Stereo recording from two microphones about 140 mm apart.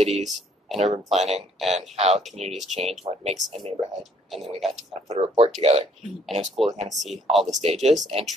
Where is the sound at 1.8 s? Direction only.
50° right (ahead or behind).